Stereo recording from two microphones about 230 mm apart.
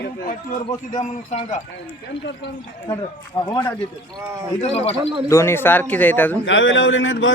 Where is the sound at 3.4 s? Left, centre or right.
Left.